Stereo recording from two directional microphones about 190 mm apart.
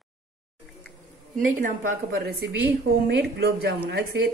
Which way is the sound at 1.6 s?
45° right (ahead or behind).